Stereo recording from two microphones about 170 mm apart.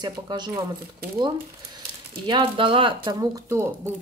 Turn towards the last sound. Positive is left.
turn(degrees=-15)  # may be behind; listen again after turning